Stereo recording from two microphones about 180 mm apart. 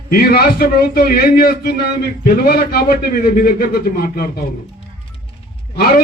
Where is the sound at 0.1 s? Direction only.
60° left (ahead or behind).